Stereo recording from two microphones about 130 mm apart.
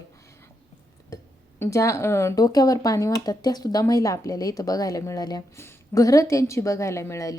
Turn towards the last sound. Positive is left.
turn(degrees=25)  # may be behind; listen again after turning